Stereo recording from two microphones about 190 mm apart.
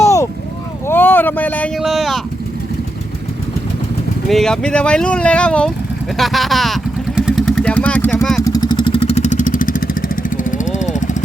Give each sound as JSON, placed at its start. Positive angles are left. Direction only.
{"t": 0.0, "sound": "vehicle", "side_deg": 15}
{"t": 0.9, "sound": "speech", "side_deg": 10}
{"t": 4.3, "sound": "speech", "side_deg": 0}
{"t": 7.2, "sound": "vehicle", "side_deg": -5}
{"t": 8.4, "sound": "vehicle", "side_deg": 20}